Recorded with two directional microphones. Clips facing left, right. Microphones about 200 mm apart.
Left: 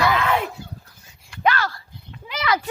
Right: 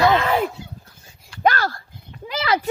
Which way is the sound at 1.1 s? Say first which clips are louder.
Right 2 dB; 40° right (ahead or behind).